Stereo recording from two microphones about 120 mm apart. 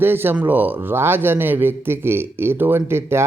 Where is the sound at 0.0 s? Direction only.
20° right (ahead or behind).